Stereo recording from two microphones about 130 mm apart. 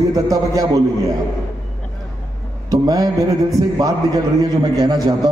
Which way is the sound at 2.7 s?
25° right (ahead or behind).